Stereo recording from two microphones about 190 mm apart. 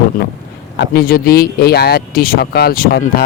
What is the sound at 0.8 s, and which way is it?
Speech, 55° left (ahead or behind).